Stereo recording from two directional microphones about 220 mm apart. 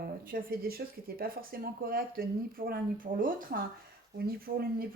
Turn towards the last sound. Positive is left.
turn(degrees=-40)  # may be behind; listen again after turning